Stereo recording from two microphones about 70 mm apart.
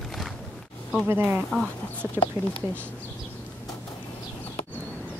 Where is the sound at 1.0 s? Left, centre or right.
Right.